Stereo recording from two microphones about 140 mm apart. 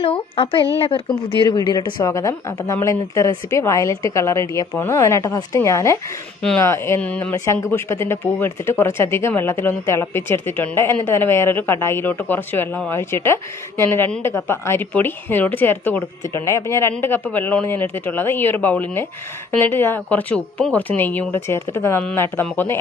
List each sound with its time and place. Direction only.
0.0 s a woman's voice: 40° left (ahead or behind); by 7.3 s 10° left (ahead or behind)
7.3 s speech: 20° left (ahead or behind)